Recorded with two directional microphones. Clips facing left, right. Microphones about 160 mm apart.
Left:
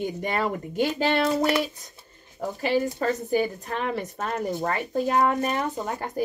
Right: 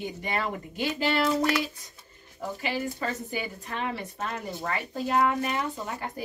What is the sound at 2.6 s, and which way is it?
Speech, 40° left (ahead or behind).